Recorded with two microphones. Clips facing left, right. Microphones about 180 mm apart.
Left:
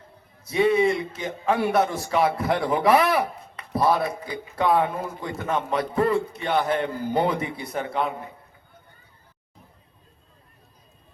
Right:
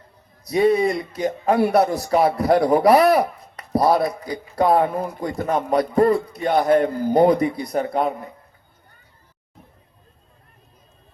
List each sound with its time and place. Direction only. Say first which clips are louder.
0.4 s a man's voice: right 3 dB; 40° right (ahead or behind)